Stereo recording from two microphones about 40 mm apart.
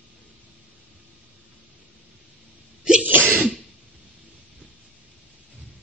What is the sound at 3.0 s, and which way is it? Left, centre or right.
Sneeze, right.